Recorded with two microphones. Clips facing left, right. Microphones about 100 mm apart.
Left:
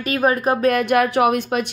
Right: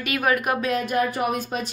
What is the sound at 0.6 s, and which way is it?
Speech, 70° left (ahead or behind).